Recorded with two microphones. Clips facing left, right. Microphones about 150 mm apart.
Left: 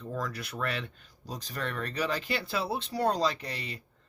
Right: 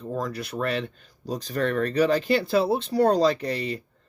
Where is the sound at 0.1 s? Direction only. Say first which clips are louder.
Right 6 dB; 30° right (ahead or behind).